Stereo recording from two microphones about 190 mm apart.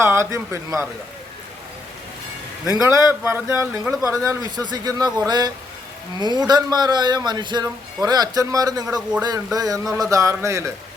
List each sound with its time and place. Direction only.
0.0 s speech: 15° right (ahead or behind)
2.8 s a man's voice: 15° right (ahead or behind)